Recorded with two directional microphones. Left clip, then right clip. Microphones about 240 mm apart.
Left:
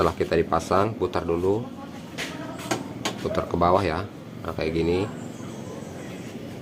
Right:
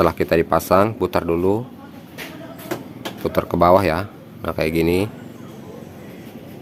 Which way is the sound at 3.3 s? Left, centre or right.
Right.